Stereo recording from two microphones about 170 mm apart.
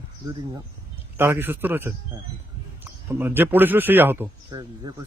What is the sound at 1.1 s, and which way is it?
Speech, 15° right (ahead or behind).